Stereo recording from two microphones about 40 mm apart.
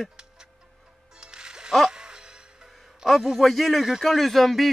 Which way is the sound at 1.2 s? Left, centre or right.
Centre.